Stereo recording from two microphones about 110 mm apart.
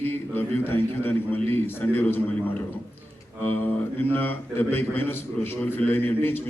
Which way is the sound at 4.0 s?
20° left (ahead or behind).